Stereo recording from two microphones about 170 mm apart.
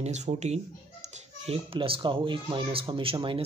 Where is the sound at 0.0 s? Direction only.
40° right (ahead or behind).